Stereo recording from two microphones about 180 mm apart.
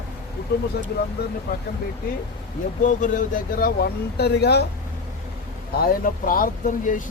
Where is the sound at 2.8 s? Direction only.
45° left (ahead or behind); by 4.7 s 65° left (ahead or behind).